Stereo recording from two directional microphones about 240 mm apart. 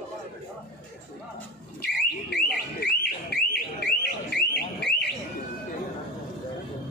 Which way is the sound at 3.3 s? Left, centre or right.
Left.